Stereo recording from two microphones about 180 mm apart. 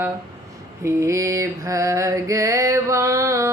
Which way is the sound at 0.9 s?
15° right (ahead or behind).